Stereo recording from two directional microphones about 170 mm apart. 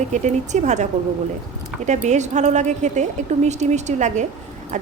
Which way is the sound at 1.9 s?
45° right (ahead or behind).